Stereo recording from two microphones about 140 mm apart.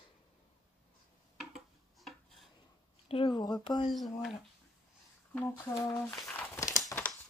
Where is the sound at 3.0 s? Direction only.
40° left (ahead or behind).